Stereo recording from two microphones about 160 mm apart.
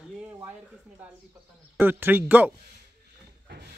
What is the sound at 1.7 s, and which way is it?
Speech, 15° right (ahead or behind).